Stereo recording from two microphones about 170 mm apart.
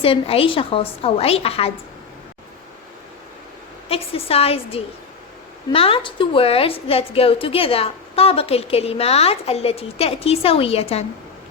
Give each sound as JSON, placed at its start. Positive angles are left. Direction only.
{"t": 0.0, "sound": "a woman's voice", "side_deg": 35}
{"t": 3.8, "sound": "a woman's voice", "side_deg": 35}